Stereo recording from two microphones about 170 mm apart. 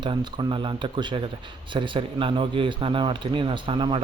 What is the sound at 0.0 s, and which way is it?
Speech, 25° right (ahead or behind).